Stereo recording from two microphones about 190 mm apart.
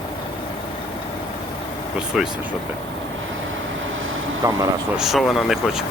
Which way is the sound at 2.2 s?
Centre (ahead or behind).